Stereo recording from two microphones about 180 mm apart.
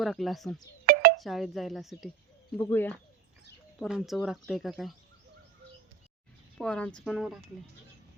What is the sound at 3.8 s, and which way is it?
Speech, centre (ahead or behind).